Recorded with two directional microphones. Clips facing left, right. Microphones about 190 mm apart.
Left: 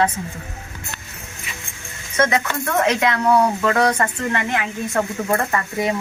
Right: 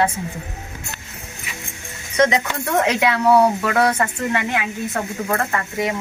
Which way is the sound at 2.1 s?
15° right (ahead or behind).